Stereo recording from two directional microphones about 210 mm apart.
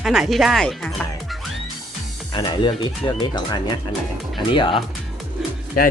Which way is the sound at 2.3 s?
20° left (ahead or behind).